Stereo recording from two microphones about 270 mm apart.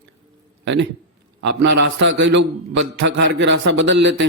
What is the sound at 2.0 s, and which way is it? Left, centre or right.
A man's voice, right.